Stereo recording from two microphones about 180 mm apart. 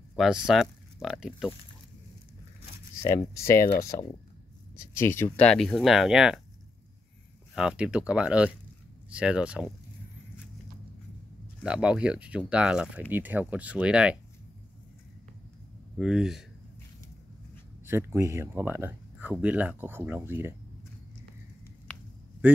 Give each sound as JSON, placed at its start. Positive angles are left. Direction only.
{"t": 0.2, "sound": "speech", "side_deg": -5}
{"t": 3.0, "sound": "speech", "side_deg": 15}
{"t": 7.5, "sound": "speech", "side_deg": -5}
{"t": 11.6, "sound": "speech", "side_deg": -5}
{"t": 16.0, "sound": "speech", "side_deg": 0}
{"t": 17.8, "sound": "speech", "side_deg": -15}